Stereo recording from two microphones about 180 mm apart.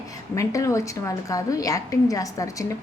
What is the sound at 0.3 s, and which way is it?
A woman's voice, 15° left (ahead or behind).